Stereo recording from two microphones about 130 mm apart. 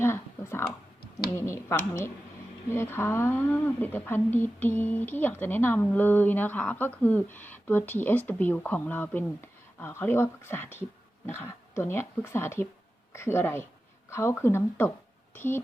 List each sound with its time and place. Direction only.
0.0 s speech: 20° left (ahead or behind)